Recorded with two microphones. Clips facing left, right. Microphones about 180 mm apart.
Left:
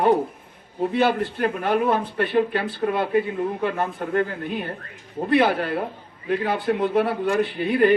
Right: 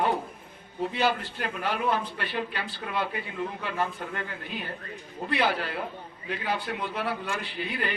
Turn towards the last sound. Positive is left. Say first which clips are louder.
# left 14 dB
turn(degrees=50)  # may be behind; listen again after turning